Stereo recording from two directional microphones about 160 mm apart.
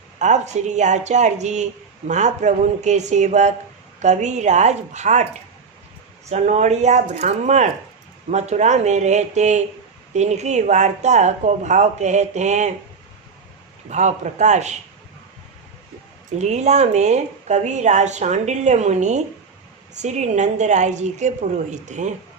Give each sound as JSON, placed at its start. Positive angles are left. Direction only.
{"t": 0.2, "sound": "a woman's voice", "side_deg": -45}
{"t": 6.2, "sound": "a woman's voice", "side_deg": -45}
{"t": 13.9, "sound": "a woman's voice", "side_deg": -45}
{"t": 16.4, "sound": "a woman's voice", "side_deg": -45}